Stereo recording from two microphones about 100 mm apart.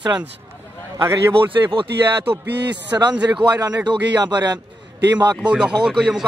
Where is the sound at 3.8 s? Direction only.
45° right (ahead or behind).